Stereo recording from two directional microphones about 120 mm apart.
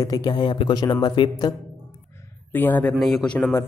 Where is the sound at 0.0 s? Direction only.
35° left (ahead or behind).